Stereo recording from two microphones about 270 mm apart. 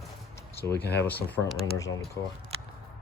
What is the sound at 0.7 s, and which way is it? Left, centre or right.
Speech, left.